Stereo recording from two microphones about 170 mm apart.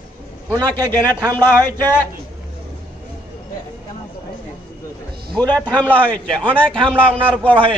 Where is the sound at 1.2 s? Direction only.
25° right (ahead or behind).